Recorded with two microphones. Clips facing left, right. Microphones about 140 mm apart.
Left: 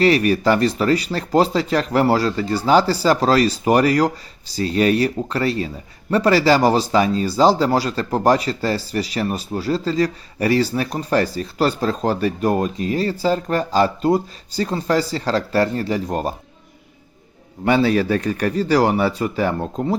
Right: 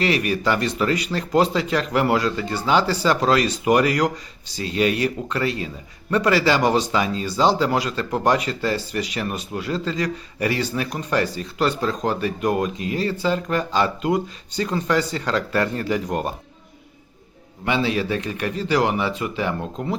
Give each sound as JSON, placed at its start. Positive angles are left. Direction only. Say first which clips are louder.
{"t": 0.0, "sound": "speech", "louder": "left 6 dB", "side_deg": 40}
{"t": 17.7, "sound": "speech", "louder": "left 5 dB", "side_deg": 45}